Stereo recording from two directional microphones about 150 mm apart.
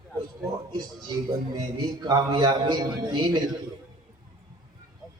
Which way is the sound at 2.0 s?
25° right (ahead or behind).